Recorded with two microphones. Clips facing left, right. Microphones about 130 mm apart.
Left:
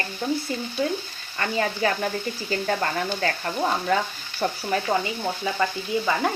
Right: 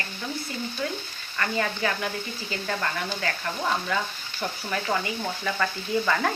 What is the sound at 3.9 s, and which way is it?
Stir, 45° left (ahead or behind).